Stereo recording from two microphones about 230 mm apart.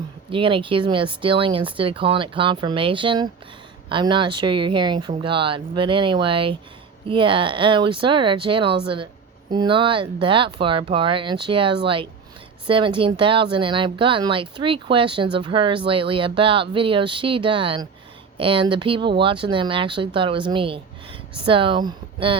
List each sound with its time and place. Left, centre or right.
0.3 s speech: right